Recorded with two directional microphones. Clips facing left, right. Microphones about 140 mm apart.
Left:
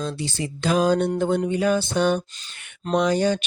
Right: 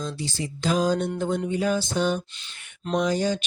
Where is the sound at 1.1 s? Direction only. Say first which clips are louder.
Left 4 dB; 65° left (ahead or behind).